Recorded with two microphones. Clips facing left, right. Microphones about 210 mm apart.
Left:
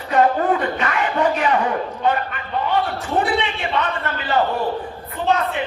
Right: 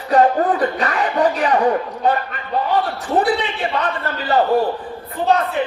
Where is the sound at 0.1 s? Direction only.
35° right (ahead or behind).